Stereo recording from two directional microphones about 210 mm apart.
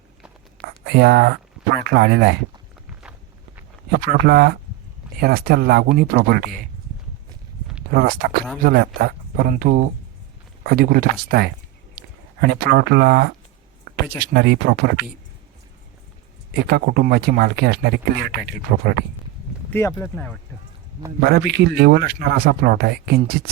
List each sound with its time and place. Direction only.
0.6 s a sound: 50° right (ahead or behind)
0.9 s speech: 50° right (ahead or behind)
3.0 s walk: 5° right (ahead or behind)
4.2 s speech: 50° right (ahead or behind)
7.9 s speech: 45° right (ahead or behind)
16.6 s speech: 45° right (ahead or behind)
19.7 s speech: 10° left (ahead or behind)
21.2 s speech: 50° right (ahead or behind)